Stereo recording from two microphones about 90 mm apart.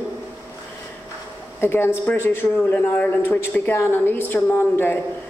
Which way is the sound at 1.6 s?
25° left (ahead or behind).